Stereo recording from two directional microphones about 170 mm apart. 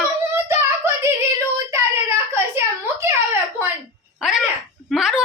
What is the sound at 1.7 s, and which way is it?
Whimper, 15° right (ahead or behind).